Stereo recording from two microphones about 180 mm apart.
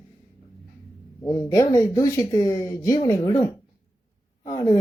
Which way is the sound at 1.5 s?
20° left (ahead or behind).